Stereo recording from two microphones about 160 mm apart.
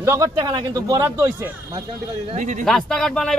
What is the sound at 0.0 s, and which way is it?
Speech, 15° right (ahead or behind).